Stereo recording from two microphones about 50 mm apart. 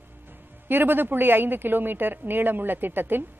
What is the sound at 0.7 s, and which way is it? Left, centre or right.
A woman's voice, right.